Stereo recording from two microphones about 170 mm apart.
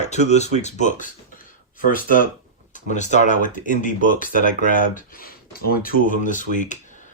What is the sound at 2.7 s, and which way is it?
Speech, 45° left (ahead or behind).